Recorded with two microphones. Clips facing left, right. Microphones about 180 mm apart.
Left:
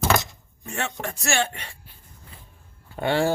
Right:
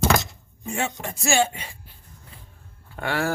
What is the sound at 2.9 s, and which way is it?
Speech, 25° left (ahead or behind).